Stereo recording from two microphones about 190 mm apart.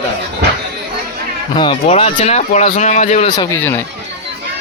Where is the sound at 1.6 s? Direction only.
30° left (ahead or behind).